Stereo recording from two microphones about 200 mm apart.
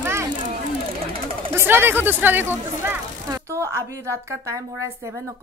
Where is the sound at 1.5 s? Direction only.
10° right (ahead or behind).